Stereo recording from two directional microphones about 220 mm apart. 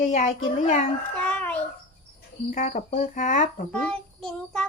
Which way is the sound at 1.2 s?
5° left (ahead or behind).